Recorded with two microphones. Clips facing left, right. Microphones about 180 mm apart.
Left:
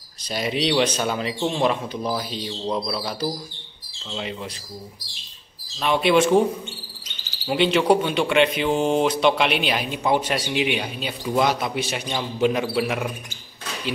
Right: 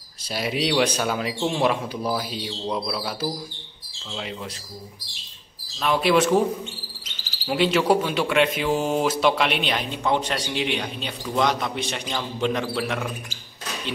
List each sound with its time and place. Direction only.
0.3 s speech: 5° right (ahead or behind)
5.8 s speech: centre (ahead or behind)
7.4 s speech: centre (ahead or behind)